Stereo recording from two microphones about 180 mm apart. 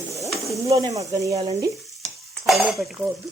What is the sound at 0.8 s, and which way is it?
Speech, 20° right (ahead or behind).